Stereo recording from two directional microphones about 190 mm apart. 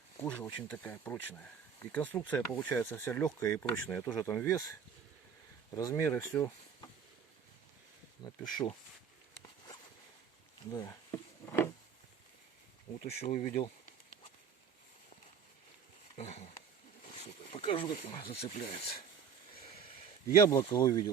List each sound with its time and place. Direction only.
0.2 s speech: 10° left (ahead or behind)
8.4 s speech: 25° left (ahead or behind)
10.7 s a sound: 20° left (ahead or behind)
13.2 s speech: 45° left (ahead or behind)
16.1 s a sound: 35° left (ahead or behind)
17.9 s speech: 30° left (ahead or behind)
20.5 s speech: 20° left (ahead or behind)